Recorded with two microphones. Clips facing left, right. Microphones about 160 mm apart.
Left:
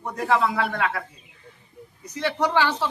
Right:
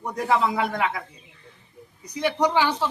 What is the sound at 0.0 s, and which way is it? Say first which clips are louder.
A woman's voice: even; 15° right (ahead or behind).